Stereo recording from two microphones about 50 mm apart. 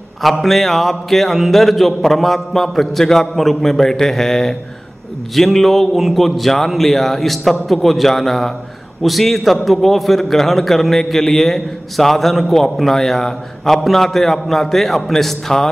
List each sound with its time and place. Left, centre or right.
0.2 s a man's voice: centre